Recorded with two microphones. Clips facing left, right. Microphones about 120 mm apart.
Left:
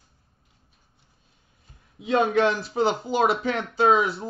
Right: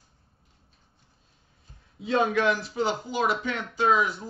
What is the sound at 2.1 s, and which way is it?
A man's voice, 25° left (ahead or behind).